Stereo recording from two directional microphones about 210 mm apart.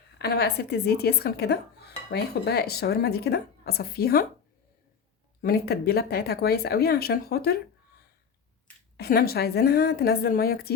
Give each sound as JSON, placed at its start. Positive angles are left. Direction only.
{"t": 0.2, "sound": "speech", "side_deg": 50}
{"t": 5.4, "sound": "speech", "side_deg": 45}
{"t": 9.0, "sound": "speech", "side_deg": 45}